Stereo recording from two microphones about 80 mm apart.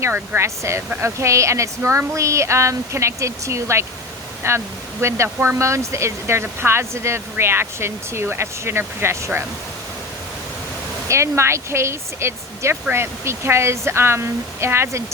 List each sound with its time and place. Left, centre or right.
0.0 s speech: right
11.1 s speech: right